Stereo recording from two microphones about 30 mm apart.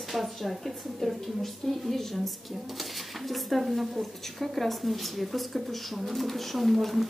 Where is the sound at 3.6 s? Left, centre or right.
Centre.